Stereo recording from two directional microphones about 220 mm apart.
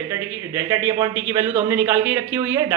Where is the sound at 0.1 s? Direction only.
10° right (ahead or behind).